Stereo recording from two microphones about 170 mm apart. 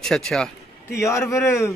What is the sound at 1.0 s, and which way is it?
Speech, 15° left (ahead or behind).